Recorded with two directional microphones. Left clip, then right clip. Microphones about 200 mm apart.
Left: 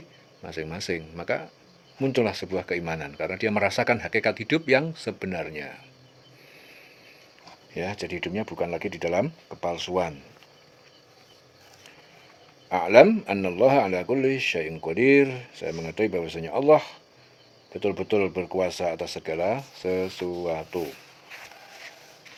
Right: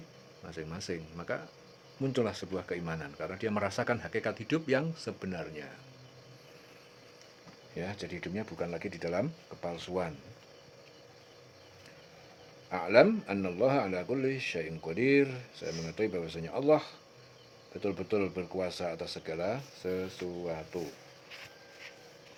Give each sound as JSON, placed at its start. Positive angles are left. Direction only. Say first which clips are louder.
{"t": 0.4, "sound": "a man's voice", "louder": "left 9 dB", "side_deg": 30}
{"t": 7.8, "sound": "a man's voice", "louder": "left 9 dB", "side_deg": 30}
{"t": 12.7, "sound": "a man's voice", "louder": "left 8 dB", "side_deg": 35}